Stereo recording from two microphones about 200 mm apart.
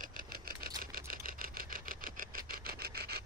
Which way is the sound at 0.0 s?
45° right (ahead or behind).